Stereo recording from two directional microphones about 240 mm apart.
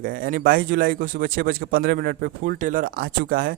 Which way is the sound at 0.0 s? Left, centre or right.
Right.